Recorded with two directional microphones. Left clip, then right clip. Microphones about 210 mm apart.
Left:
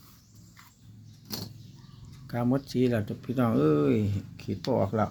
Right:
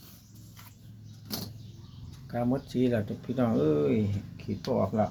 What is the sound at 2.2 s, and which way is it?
Speech, 35° left (ahead or behind).